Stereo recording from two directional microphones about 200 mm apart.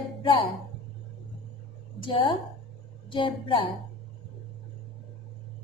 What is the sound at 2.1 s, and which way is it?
A woman's voice, 25° left (ahead or behind).